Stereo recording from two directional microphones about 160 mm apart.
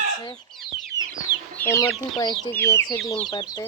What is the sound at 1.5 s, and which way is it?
Speech, 15° left (ahead or behind).